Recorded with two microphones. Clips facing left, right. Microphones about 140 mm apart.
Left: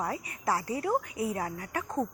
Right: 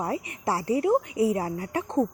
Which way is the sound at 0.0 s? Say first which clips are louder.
Right 4 dB; 30° right (ahead or behind).